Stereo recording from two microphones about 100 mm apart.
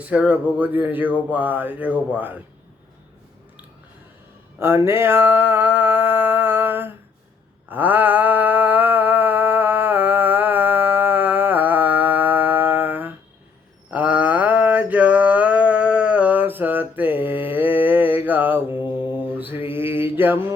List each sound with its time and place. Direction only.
0.0 s speech: 10° right (ahead or behind)
4.6 s mantra: 25° right (ahead or behind)
7.7 s a sound: 20° right (ahead or behind)
13.9 s mantra: 15° right (ahead or behind)